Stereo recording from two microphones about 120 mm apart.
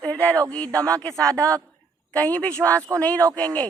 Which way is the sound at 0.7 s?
30° right (ahead or behind).